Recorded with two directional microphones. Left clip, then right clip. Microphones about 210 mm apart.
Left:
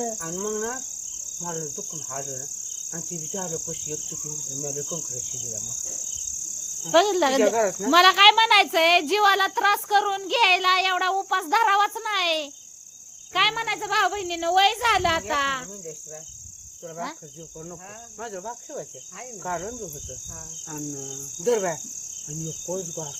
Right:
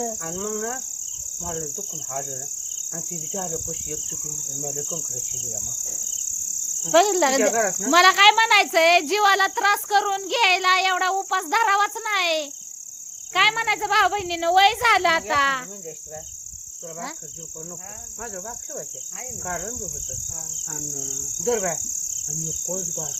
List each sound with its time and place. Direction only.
0.2 s cricket: 15° left (ahead or behind)
6.9 s speech: 10° right (ahead or behind)
7.5 s speech: 40° left (ahead or behind)
7.9 s speech: centre (ahead or behind)
13.3 s speech: 20° right (ahead or behind)
18.2 s speech: 40° left (ahead or behind)